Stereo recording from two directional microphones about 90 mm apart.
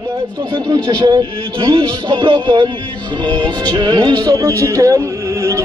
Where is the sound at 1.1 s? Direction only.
60° right (ahead or behind).